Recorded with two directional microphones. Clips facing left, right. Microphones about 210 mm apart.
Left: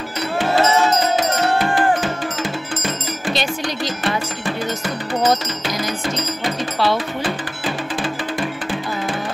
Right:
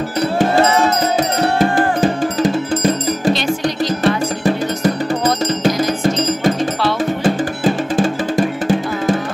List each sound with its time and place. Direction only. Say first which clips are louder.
1.6 s music: right 4 dB; 40° right (ahead or behind)
7.2 s music: right 9 dB; 45° right (ahead or behind)